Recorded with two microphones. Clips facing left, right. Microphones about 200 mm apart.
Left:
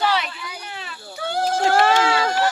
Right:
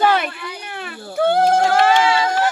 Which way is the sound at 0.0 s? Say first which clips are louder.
Right 5 dB; 50° right (ahead or behind).